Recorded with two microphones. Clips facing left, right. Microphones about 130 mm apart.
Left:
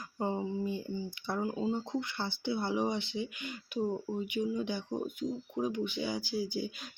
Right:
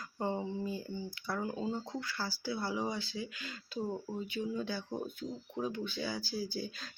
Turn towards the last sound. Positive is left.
turn(degrees=15)  # may be behind; listen again after turning